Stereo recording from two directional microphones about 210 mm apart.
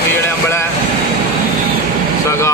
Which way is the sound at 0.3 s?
10° left (ahead or behind).